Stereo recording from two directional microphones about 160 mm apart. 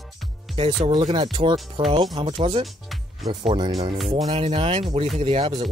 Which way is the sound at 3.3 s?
30° right (ahead or behind).